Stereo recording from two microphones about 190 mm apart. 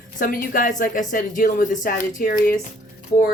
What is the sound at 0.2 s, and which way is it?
Speech, 45° left (ahead or behind).